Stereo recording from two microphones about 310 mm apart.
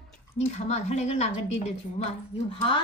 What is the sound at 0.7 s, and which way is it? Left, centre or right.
A woman's voice, left.